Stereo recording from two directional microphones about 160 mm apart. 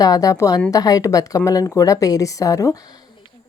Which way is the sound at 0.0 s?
20° left (ahead or behind).